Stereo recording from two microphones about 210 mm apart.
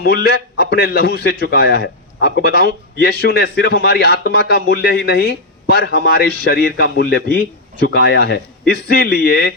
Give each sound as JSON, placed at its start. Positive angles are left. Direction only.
{"t": 0.0, "sound": "a man's voice", "side_deg": 50}